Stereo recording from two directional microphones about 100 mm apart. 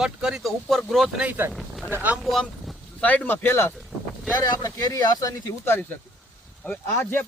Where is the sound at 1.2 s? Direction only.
20° right (ahead or behind).